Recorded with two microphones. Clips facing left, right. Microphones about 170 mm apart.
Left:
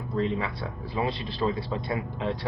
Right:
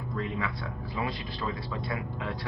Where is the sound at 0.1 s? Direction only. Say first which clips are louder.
Left 6 dB; 30° left (ahead or behind).